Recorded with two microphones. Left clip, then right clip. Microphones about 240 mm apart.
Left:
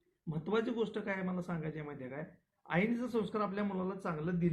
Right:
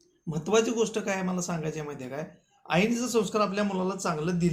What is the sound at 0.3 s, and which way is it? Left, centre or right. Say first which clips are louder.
Speech: right 10 dB; centre.